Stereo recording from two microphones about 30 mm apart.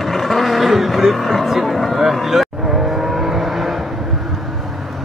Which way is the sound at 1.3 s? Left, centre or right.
Centre.